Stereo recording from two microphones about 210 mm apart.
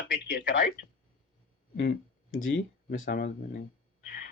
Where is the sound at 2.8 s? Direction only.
40° left (ahead or behind).